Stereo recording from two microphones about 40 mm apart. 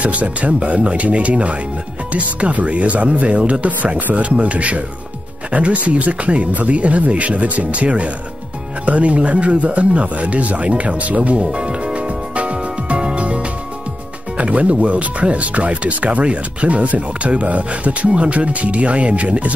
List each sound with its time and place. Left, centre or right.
0.0 s speech: right
11.5 s music: right
14.3 s speech: right